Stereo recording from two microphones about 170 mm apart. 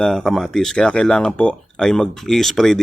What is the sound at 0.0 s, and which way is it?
Speech, centre (ahead or behind).